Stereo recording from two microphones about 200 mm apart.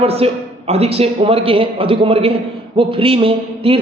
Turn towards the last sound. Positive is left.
turn(degrees=-30)  # may be behind; listen again after turning